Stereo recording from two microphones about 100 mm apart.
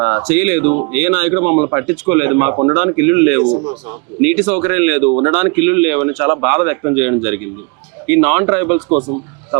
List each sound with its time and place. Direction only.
0.0 s speech: 25° right (ahead or behind)
3.4 s a man's voice: 35° right (ahead or behind)
4.2 s speech: 20° right (ahead or behind)